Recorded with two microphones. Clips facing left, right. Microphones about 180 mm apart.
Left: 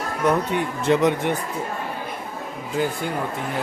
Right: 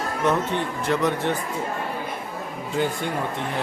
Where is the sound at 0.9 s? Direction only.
15° left (ahead or behind).